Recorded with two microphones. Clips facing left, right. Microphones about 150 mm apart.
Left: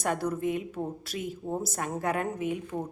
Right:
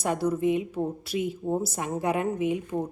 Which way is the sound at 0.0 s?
10° right (ahead or behind).